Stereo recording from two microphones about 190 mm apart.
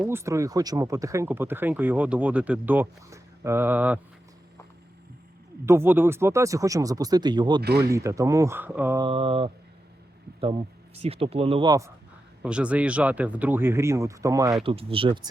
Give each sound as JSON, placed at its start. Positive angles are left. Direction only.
{"t": 0.1, "sound": "speech", "side_deg": -15}
{"t": 5.6, "sound": "speech", "side_deg": -10}
{"t": 9.0, "sound": "speech", "side_deg": -30}
{"t": 12.4, "sound": "speech", "side_deg": -5}
{"t": 14.6, "sound": "speech", "side_deg": -30}